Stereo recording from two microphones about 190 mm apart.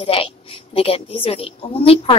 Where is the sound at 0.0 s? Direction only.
30° left (ahead or behind).